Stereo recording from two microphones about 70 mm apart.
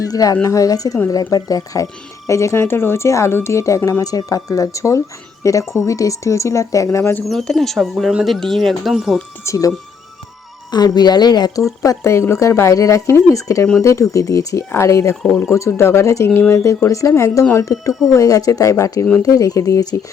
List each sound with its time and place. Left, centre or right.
0.0 s speech: left
7.3 s speech: centre
9.4 s speech: left
10.7 s a woman's voice: left
11.8 s speech: left
19.2 s speech: left